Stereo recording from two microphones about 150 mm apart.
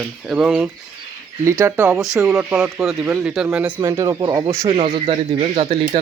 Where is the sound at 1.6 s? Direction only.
20° right (ahead or behind).